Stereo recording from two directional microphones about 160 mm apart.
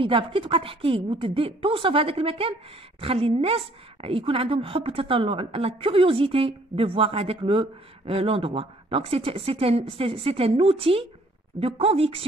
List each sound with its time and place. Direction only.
0.0 s a woman's voice: 30° right (ahead or behind)